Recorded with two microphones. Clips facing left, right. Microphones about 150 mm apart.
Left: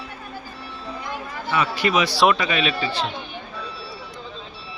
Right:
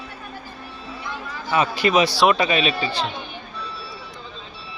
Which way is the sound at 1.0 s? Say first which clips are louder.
Even; 50° left (ahead or behind).